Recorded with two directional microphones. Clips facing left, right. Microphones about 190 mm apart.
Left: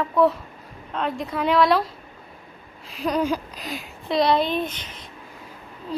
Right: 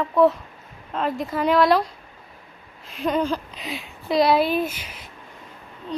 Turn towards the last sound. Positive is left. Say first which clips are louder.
# even
turn(degrees=5)  # may be behind; listen again after turning